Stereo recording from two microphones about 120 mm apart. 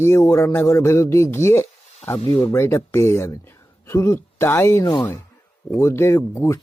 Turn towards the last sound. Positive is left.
turn(degrees=25)  # may be behind; listen again after turning